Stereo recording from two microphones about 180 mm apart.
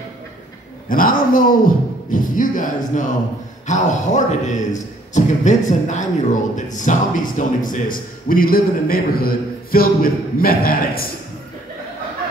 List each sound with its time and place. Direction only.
0.8 s a man's voice: 50° left (ahead or behind)